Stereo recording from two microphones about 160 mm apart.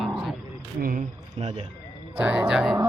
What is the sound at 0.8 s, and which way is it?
Speech, 55° right (ahead or behind).